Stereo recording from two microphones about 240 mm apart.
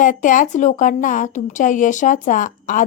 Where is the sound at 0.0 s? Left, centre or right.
Left.